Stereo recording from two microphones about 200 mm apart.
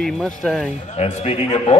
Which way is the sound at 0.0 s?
Centre (ahead or behind).